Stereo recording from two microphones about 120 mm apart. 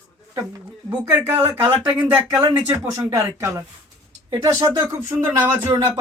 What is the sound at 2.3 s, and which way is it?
Speech, 25° right (ahead or behind).